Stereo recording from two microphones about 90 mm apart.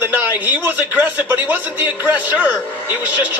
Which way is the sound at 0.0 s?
20° right (ahead or behind).